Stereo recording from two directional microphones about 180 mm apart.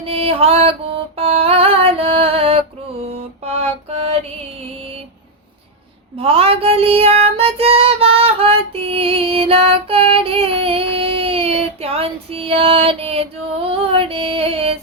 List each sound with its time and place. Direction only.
0.0 s music: 35° right (ahead or behind)
3.1 s mantra: 35° right (ahead or behind)
6.1 s child singing: 30° right (ahead or behind)